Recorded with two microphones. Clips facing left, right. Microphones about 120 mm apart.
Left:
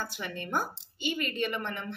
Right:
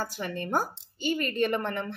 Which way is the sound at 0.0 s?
40° right (ahead or behind).